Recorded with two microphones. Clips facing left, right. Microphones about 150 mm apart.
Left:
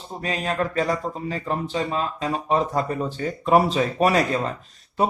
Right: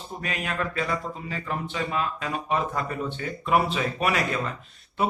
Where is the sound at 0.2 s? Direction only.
30° left (ahead or behind).